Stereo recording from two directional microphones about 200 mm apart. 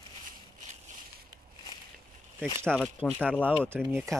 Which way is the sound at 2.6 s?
5° left (ahead or behind).